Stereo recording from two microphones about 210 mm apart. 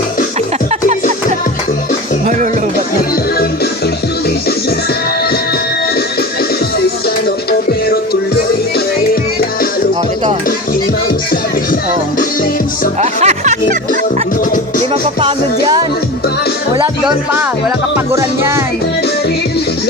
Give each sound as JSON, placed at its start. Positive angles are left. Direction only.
{"t": 13.0, "sound": "music", "side_deg": -35}
{"t": 15.2, "sound": "music", "side_deg": -20}